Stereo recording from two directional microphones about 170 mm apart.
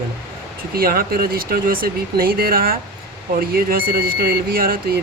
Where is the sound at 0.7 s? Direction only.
60° right (ahead or behind).